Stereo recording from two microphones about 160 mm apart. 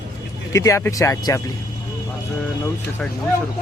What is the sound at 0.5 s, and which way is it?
Speech, 20° left (ahead or behind).